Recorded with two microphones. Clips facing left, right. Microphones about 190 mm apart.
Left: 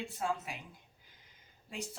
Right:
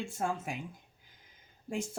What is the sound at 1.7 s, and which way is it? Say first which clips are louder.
Speech: right 7 dB; 50° right (ahead or behind).